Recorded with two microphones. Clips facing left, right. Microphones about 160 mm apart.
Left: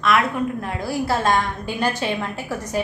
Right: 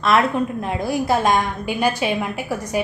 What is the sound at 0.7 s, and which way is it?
A woman's voice, 20° right (ahead or behind).